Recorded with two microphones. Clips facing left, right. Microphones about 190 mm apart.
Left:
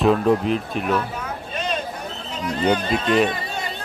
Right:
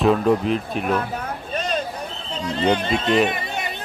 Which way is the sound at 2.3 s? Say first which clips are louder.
Even; 30° right (ahead or behind).